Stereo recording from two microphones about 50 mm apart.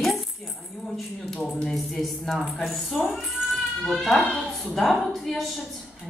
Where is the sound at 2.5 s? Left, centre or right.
Centre.